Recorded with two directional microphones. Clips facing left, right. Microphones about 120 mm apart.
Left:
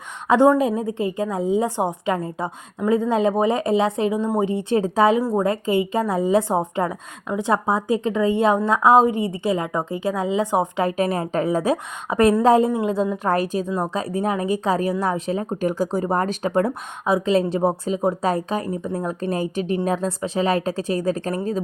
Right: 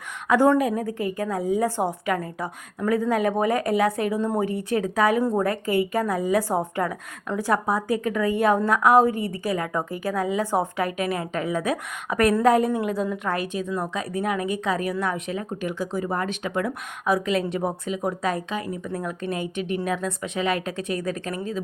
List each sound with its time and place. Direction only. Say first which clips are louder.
0.3 s a woman's voice: left 3 dB; 20° left (ahead or behind)
10.8 s a woman's voice: left 5 dB; 35° left (ahead or behind)
13.3 s a woman's voice: left 5 dB; 40° left (ahead or behind)
17.1 s a woman's voice: left 4 dB; 25° left (ahead or behind)